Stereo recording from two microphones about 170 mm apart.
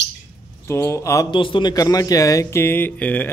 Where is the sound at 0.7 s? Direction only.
15° left (ahead or behind).